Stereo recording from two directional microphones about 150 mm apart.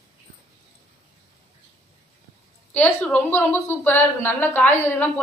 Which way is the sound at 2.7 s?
5° left (ahead or behind).